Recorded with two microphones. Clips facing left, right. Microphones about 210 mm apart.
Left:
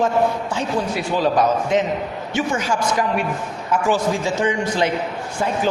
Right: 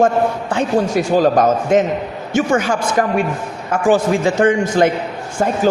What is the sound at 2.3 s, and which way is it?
A man's voice, 55° right (ahead or behind).